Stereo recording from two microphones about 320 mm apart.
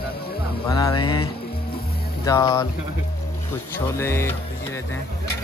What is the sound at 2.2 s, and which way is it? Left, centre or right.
Speech, centre.